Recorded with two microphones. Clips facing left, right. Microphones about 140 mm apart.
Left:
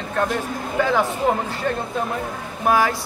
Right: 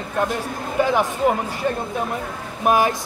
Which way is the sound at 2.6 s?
20° right (ahead or behind).